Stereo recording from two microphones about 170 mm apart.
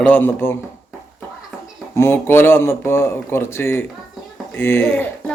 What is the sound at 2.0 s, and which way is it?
Speech, 15° left (ahead or behind).